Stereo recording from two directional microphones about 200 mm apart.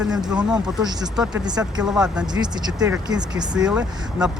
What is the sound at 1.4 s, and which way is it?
Speech, 20° right (ahead or behind).